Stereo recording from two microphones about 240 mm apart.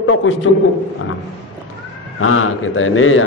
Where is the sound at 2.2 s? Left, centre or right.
Left.